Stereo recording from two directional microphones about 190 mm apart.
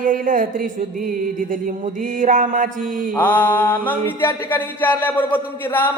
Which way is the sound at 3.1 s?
10° left (ahead or behind).